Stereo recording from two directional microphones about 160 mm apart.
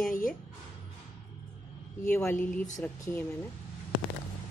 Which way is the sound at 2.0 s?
15° left (ahead or behind).